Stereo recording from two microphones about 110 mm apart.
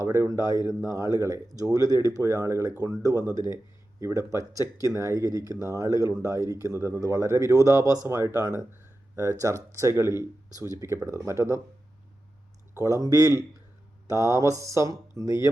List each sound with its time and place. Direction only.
0.0 s speech: 30° right (ahead or behind)
12.8 s speech: 30° right (ahead or behind)